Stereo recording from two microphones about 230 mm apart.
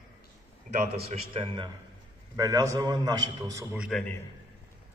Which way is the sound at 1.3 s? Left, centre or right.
Right.